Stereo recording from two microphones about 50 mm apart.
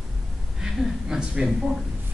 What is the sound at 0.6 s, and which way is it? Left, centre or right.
Speech, centre.